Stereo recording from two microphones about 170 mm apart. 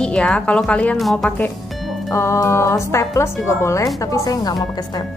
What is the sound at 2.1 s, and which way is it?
A woman's voice, 15° left (ahead or behind).